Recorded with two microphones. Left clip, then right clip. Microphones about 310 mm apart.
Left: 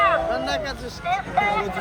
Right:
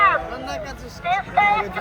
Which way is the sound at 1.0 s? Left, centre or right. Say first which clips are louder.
Right 4 dB; right.